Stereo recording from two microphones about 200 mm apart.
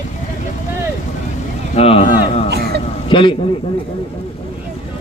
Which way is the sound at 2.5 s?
55° right (ahead or behind).